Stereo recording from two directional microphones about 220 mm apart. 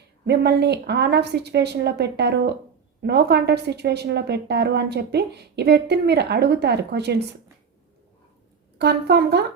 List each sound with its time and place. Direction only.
0.3 s a woman's voice: 50° right (ahead or behind)
8.8 s a woman's voice: 50° right (ahead or behind)